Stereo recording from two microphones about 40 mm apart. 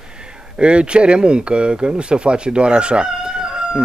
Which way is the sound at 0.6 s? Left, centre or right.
Right.